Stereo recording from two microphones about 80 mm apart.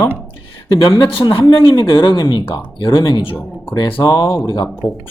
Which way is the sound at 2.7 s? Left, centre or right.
Left.